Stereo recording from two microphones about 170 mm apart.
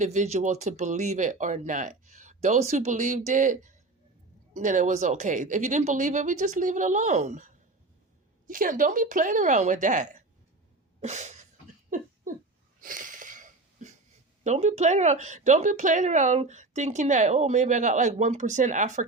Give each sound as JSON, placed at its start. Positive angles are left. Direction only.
{"t": 0.0, "sound": "speech", "side_deg": -45}
{"t": 11.0, "sound": "a sound", "side_deg": -45}
{"t": 14.4, "sound": "speech", "side_deg": -45}